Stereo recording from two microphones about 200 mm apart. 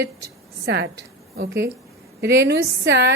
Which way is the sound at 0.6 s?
60° right (ahead or behind).